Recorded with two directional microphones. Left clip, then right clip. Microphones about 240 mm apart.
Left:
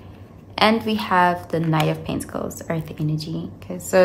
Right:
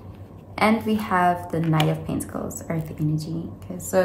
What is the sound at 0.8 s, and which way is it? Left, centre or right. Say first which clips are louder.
A woman's voice: left 3 dB; centre.